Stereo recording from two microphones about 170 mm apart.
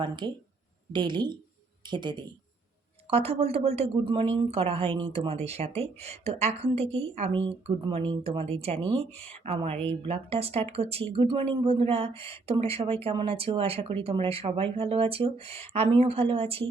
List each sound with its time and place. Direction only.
0.0 s speech: 25° right (ahead or behind)
3.1 s speech: 35° right (ahead or behind)